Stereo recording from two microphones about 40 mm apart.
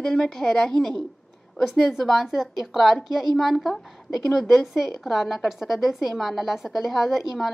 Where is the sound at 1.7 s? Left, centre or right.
Centre.